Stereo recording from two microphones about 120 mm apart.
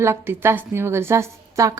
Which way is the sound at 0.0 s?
20° right (ahead or behind).